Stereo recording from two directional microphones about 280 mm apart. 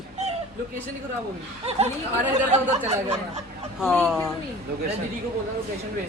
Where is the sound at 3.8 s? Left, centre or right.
Centre.